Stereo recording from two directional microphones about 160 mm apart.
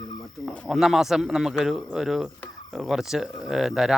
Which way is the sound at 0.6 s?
Centre (ahead or behind).